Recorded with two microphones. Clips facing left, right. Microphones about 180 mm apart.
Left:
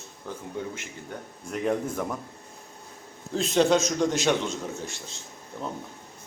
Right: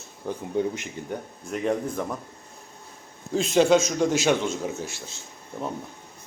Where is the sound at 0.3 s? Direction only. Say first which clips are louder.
Right 6 dB; 15° right (ahead or behind).